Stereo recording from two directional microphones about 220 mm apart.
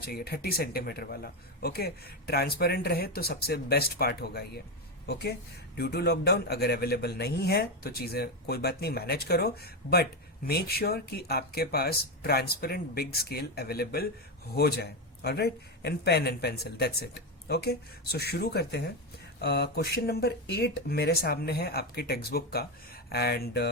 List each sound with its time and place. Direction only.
0.1 s a man's voice: 45° left (ahead or behind)
5.7 s a man's voice: 45° left (ahead or behind)